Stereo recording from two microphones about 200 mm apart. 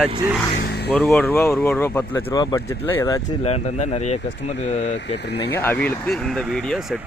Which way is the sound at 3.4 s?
35° left (ahead or behind).